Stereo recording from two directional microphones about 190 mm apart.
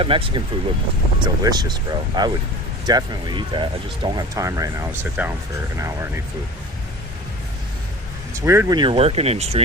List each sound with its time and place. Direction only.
0.0 s speech: 30° right (ahead or behind)
8.3 s speech: 15° right (ahead or behind); by 9.6 s 30° right (ahead or behind)